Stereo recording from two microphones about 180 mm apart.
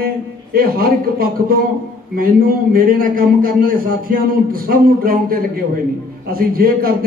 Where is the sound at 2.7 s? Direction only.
50° right (ahead or behind).